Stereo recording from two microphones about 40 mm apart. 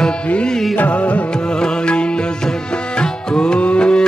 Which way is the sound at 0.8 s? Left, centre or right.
Left.